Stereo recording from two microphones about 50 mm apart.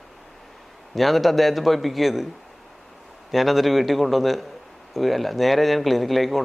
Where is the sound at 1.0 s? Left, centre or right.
Centre.